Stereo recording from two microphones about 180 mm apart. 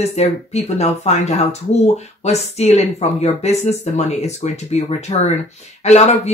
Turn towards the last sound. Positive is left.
turn(degrees=35)  # may be behind; listen again after turning